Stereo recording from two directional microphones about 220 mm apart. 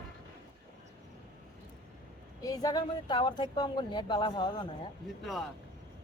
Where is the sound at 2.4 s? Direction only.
15° left (ahead or behind).